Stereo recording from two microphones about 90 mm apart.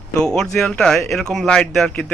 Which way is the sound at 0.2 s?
5° left (ahead or behind).